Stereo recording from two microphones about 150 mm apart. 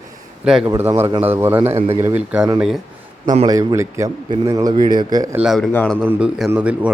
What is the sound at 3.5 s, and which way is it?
A man's voice, 20° right (ahead or behind).